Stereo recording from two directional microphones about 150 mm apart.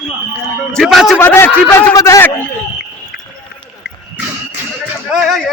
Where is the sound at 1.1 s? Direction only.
15° left (ahead or behind).